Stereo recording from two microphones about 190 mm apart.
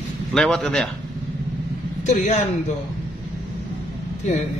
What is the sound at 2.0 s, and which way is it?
Speech, 35° left (ahead or behind).